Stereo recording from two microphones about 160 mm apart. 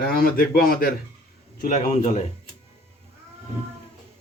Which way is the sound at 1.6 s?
45° left (ahead or behind).